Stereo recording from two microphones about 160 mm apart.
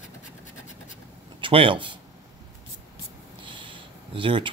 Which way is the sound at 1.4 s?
35° right (ahead or behind).